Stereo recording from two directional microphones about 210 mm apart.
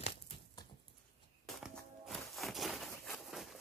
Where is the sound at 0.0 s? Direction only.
25° left (ahead or behind).